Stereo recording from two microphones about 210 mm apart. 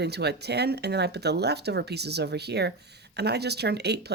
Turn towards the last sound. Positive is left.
turn(degrees=-50)  # may be behind; listen again after turning